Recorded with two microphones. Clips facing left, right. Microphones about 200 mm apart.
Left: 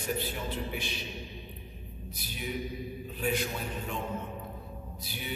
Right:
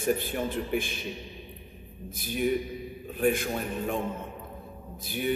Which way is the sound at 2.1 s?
50° right (ahead or behind).